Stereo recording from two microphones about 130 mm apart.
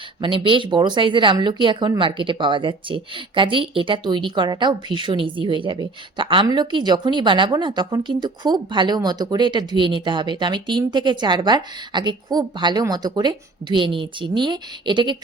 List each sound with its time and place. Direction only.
0.2 s a woman's voice: 40° right (ahead or behind)